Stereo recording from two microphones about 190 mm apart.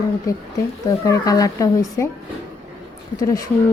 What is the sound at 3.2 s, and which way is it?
Speech, 20° left (ahead or behind).